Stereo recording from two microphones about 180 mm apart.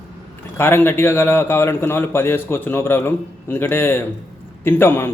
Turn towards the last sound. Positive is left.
turn(degrees=15)  # may be behind; listen again after turning